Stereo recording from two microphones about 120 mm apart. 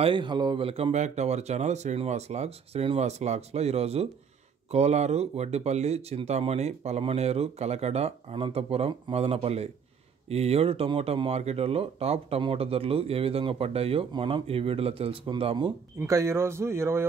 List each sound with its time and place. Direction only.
0.0 s speech: 40° right (ahead or behind)
0.9 s speech: 70° right (ahead or behind); by 15.7 s 45° right (ahead or behind)
16.0 s speech: 25° right (ahead or behind)